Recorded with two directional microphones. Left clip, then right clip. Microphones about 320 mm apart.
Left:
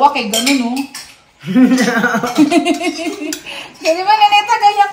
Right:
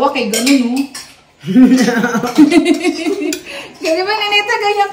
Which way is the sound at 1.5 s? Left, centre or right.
Left.